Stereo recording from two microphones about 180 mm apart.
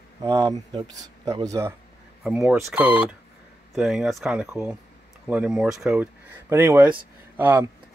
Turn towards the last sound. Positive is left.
turn(degrees=-10)  # may be behind; listen again after turning